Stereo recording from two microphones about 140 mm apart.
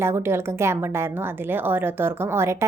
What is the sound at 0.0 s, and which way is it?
A woman's voice, 20° right (ahead or behind).